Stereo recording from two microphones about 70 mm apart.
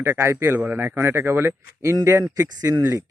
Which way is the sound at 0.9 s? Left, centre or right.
Right.